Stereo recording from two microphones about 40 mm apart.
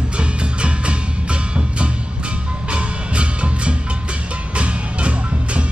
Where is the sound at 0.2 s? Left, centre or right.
Right.